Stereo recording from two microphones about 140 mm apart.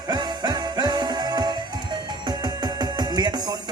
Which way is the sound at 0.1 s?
30° right (ahead or behind).